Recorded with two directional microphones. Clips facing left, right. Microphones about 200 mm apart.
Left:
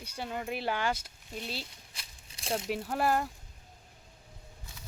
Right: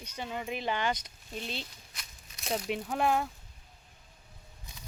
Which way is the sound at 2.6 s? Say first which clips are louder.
Right 1 dB; 5° left (ahead or behind).